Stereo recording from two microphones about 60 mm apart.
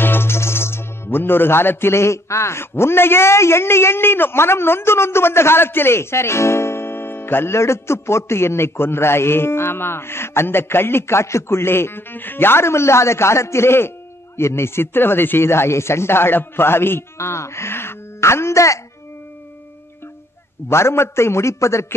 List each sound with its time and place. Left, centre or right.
0.0 s speech: left
20.6 s speech: left